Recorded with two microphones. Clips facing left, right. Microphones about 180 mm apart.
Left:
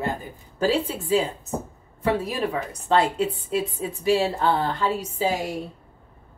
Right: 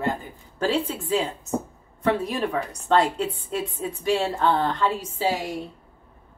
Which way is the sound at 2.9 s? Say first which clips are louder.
Even; centre (ahead or behind).